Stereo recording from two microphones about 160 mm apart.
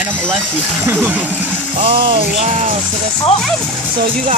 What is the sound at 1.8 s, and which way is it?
Music, 35° right (ahead or behind).